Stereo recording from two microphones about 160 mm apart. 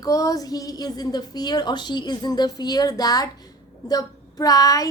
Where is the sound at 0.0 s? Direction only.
20° left (ahead or behind).